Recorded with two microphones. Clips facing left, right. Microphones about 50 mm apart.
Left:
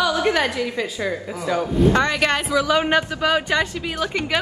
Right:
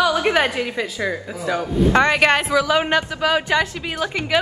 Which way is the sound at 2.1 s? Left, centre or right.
Right.